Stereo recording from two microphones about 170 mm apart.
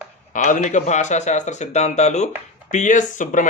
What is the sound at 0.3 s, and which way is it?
A man's voice, 45° left (ahead or behind).